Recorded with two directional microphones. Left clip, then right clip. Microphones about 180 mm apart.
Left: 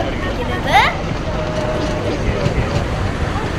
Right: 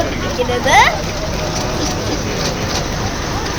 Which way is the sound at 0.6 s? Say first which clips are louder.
Right 3 dB; 25° right (ahead or behind).